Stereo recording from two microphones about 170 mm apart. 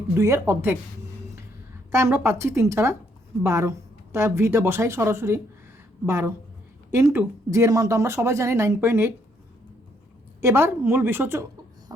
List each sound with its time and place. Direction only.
0.1 s speech: 15° right (ahead or behind)
1.9 s speech: 15° right (ahead or behind)
10.4 s speech: 15° right (ahead or behind)
11.9 s beatboxing: 20° right (ahead or behind)